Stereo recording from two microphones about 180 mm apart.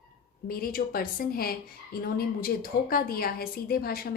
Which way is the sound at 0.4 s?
55° left (ahead or behind).